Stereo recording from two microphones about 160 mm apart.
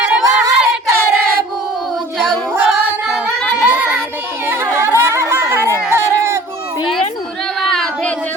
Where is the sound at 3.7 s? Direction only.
10° right (ahead or behind).